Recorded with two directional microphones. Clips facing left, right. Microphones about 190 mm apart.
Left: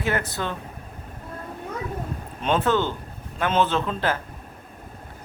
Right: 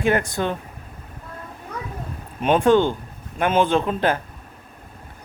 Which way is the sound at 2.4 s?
15° right (ahead or behind).